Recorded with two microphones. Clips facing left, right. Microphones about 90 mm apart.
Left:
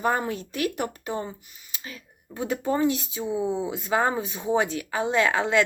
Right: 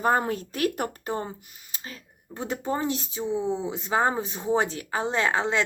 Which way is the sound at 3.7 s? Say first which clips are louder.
Right 1 dB; 25° right (ahead or behind).